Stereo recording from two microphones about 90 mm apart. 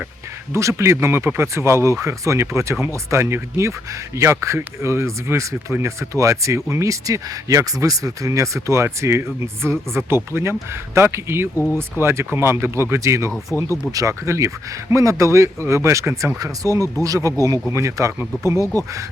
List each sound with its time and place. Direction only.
0.5 s speech: 30° right (ahead or behind)
11.5 s speech: 30° left (ahead or behind)
11.8 s speech: 25° right (ahead or behind)
18.6 s speech: 30° left (ahead or behind)